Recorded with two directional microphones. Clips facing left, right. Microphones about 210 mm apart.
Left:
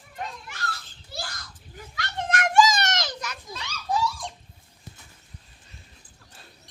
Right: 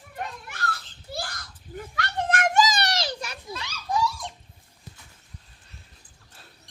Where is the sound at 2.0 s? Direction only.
50° right (ahead or behind); by 3.3 s 30° right (ahead or behind).